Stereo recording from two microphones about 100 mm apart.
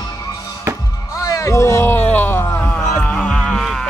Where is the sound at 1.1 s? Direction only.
35° left (ahead or behind).